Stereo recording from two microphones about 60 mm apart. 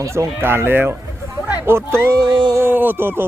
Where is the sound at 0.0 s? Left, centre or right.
Right.